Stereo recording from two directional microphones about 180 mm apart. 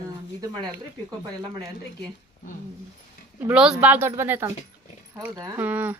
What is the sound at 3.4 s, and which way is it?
Speech, 5° right (ahead or behind).